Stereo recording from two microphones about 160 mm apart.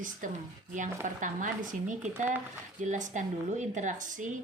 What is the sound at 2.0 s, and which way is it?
Speech, 10° right (ahead or behind).